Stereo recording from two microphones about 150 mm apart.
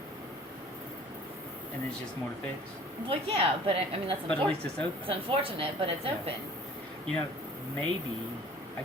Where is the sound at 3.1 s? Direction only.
40° right (ahead or behind).